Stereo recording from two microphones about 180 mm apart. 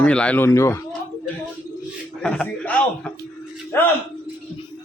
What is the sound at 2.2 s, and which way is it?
A man's voice, 5° left (ahead or behind).